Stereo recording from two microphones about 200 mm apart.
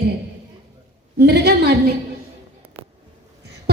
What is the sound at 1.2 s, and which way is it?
Speech, 55° right (ahead or behind).